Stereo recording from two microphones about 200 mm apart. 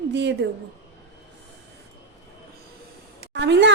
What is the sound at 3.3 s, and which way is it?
Speech, 60° right (ahead or behind).